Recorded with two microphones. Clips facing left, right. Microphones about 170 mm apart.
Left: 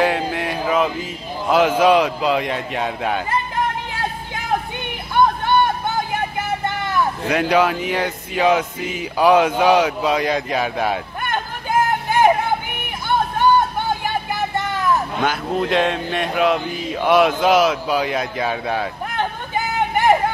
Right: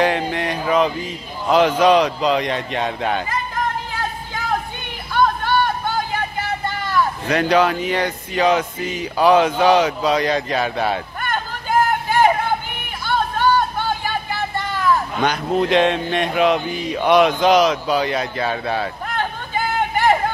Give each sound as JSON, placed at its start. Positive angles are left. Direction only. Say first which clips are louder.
{"t": 0.0, "sound": "speech", "louder": "even", "side_deg": 5}
{"t": 5.1, "sound": "vehicle", "louder": "left 1 dB", "side_deg": 20}
{"t": 7.2, "sound": "speech", "louder": "even", "side_deg": 10}
{"t": 13.0, "sound": "vehicle", "louder": "left 1 dB", "side_deg": 15}
{"t": 15.2, "sound": "speech", "louder": "right 5 dB", "side_deg": 0}